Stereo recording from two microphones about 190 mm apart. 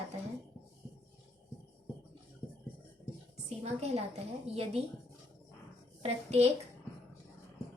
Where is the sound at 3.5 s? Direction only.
35° right (ahead or behind).